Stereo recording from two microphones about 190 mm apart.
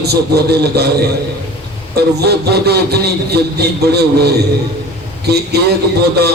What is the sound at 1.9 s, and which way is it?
A man's voice, 60° right (ahead or behind).